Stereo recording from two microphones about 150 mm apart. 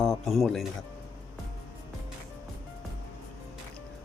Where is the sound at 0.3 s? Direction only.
Centre (ahead or behind).